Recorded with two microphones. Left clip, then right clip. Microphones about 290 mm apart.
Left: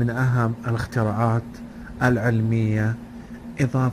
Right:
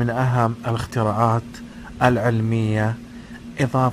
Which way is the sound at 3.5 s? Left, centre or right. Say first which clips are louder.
Right 5 dB; right.